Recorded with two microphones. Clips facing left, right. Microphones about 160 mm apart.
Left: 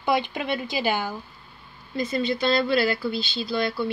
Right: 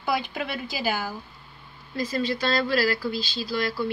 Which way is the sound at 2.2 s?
Centre (ahead or behind).